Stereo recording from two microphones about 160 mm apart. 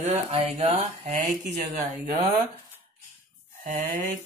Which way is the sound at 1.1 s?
70° right (ahead or behind).